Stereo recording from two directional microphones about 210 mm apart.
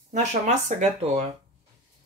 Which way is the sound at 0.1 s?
35° right (ahead or behind).